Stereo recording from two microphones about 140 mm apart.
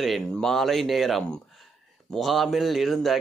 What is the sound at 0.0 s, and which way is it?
A man's voice, centre (ahead or behind).